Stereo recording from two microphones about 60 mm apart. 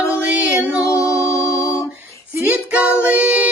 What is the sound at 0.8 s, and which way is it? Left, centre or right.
Music, left.